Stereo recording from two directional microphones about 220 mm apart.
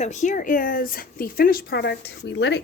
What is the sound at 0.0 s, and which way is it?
Speech, 35° left (ahead or behind).